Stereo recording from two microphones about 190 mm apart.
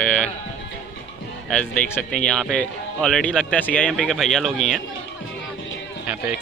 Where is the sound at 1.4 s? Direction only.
5° left (ahead or behind).